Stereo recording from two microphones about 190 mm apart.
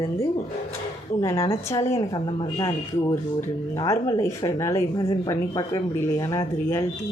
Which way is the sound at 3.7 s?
20° left (ahead or behind).